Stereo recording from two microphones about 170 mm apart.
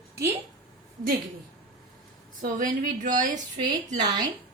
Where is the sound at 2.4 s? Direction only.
50° right (ahead or behind).